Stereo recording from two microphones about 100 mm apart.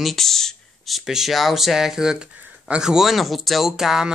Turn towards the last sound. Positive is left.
turn(degrees=-5)  # may be behind; listen again after turning